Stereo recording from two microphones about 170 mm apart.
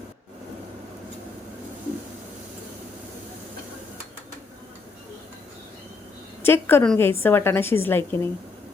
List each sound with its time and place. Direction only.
6.4 s a woman's voice: 15° left (ahead or behind)